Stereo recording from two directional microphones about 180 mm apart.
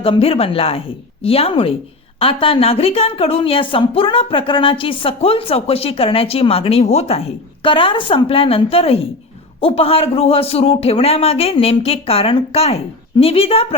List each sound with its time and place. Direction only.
0.0 s speech: 30° left (ahead or behind)